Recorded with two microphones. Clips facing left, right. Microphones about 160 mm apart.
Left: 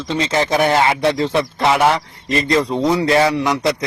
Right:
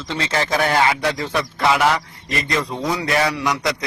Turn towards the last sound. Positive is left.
turn(degrees=25)  # may be behind; listen again after turning